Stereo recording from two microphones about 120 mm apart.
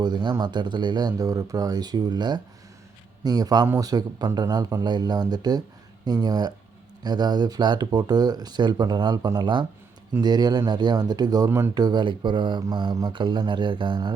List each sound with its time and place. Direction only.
0.0 s speech: 35° right (ahead or behind)
11.4 s speech: 20° right (ahead or behind)
11.7 s speech: 35° right (ahead or behind)